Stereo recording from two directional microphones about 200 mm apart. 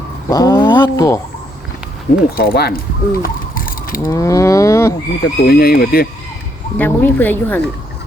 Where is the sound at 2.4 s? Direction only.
50° left (ahead or behind).